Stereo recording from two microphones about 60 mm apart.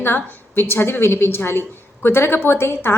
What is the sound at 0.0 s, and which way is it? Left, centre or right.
A woman's voice, left.